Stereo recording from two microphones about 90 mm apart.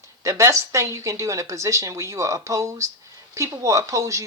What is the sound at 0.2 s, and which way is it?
Speech, 35° right (ahead or behind).